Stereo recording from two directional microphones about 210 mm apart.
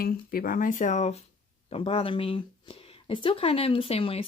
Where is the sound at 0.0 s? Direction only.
45° left (ahead or behind).